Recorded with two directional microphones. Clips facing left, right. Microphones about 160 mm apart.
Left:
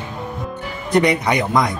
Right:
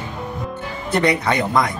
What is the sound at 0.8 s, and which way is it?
Speech, 15° left (ahead or behind).